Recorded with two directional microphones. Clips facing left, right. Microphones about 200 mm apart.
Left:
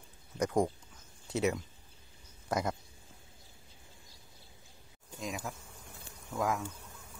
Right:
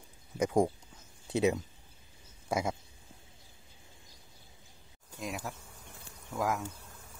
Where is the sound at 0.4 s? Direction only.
10° right (ahead or behind).